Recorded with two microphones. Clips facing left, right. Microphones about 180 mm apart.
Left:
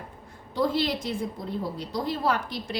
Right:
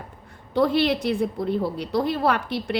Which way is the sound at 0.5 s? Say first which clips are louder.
Right 5 dB; 65° right (ahead or behind).